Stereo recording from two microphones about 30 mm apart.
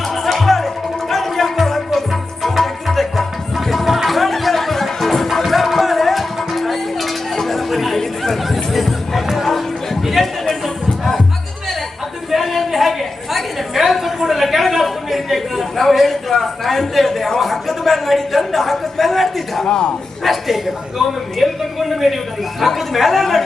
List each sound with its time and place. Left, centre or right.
0.1 s music: centre
8.4 s chatter: centre
9.3 s music: centre
12.3 s a sound: centre
14.8 s chatter: centre
15.7 s a sound: centre
19.6 s a man's voice: left
20.2 s a sound: centre
21.0 s a man's voice: centre